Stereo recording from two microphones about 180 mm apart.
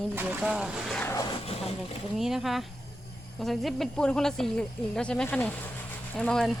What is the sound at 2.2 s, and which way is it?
Speech, centre (ahead or behind).